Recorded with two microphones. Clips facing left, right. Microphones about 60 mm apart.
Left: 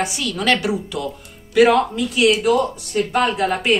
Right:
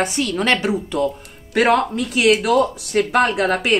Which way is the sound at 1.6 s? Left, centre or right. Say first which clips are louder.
Left 2 dB; right.